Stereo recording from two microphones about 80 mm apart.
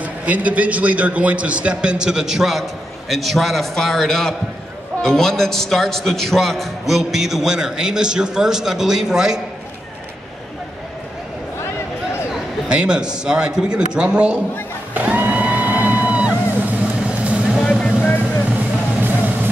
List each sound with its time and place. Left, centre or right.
0.0 s a man's voice: centre
12.6 s a man's voice: centre
15.0 s music: right
17.2 s vehicle: centre
17.6 s music: centre
18.9 s music: right